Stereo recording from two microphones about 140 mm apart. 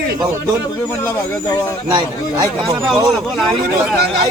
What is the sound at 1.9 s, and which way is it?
Speech, 30° right (ahead or behind).